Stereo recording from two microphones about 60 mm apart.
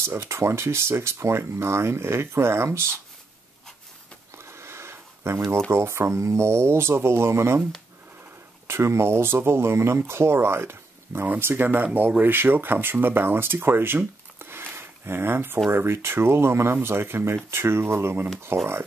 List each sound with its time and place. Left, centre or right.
0.0 s speech: right
4.4 s a sound: right
5.7 s speech: right
8.6 s speech: right